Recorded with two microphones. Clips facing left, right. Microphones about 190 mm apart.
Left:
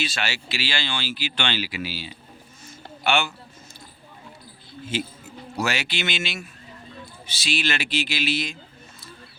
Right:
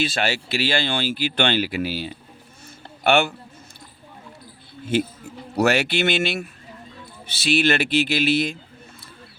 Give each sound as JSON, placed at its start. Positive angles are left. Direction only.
{"t": 0.0, "sound": "speech", "side_deg": -50}
{"t": 5.5, "sound": "speech", "side_deg": -60}